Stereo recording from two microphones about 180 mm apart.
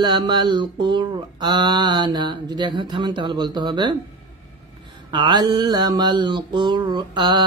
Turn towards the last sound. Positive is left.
turn(degrees=-25)  # may be behind; listen again after turning